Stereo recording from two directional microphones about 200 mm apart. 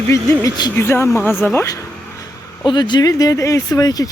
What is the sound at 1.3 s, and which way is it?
Speech, 5° right (ahead or behind).